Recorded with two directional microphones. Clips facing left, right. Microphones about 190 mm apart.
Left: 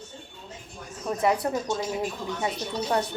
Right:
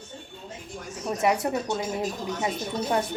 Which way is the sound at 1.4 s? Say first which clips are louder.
Even; 15° right (ahead or behind).